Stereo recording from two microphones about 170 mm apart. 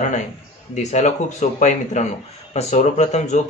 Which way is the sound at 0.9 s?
45° left (ahead or behind).